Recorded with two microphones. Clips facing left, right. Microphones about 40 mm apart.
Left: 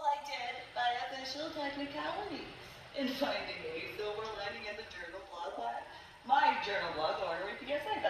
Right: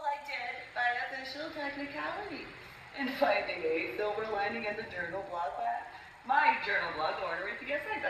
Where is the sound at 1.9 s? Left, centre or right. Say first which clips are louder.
Right 1 dB; centre.